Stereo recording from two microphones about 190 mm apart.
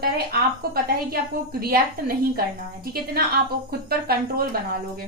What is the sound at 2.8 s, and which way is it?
Speech, 55° right (ahead or behind).